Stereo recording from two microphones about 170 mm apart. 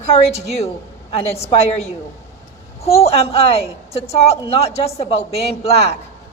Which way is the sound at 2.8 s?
35° left (ahead or behind).